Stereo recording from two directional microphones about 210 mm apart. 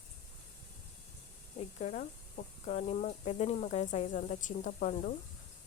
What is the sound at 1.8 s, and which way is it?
Speech, 35° left (ahead or behind).